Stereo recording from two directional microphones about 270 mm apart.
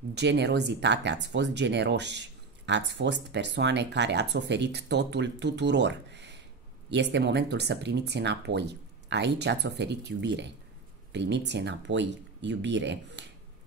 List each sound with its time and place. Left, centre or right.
0.1 s speech: right